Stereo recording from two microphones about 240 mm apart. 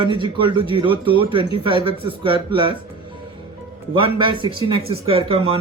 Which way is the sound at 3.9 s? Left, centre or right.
Right.